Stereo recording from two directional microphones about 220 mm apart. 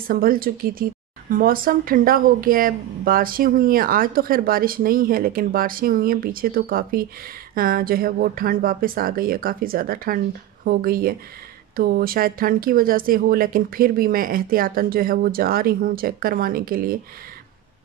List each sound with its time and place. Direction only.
0.1 s speech: 40° right (ahead or behind)